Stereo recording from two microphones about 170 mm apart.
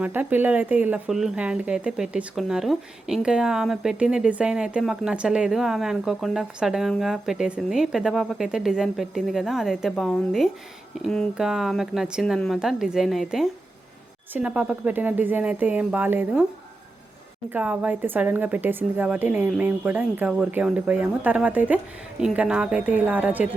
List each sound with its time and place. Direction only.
0.0 s a woman's voice: 10° right (ahead or behind)
17.5 s a woman's voice: 10° right (ahead or behind)